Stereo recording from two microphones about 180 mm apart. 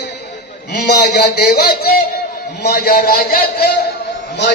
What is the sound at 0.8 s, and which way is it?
A man's voice, 70° left (ahead or behind).